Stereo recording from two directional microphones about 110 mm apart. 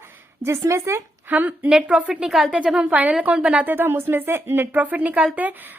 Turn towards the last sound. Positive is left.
turn(degrees=-15)  # may be behind; listen again after turning